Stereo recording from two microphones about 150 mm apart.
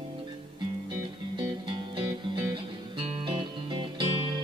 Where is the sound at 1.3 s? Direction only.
30° right (ahead or behind).